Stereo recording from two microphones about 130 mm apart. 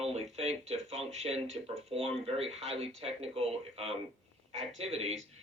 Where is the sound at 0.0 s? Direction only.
50° right (ahead or behind).